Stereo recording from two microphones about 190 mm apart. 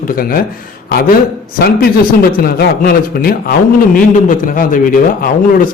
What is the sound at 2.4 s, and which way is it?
A man's voice, 50° left (ahead or behind).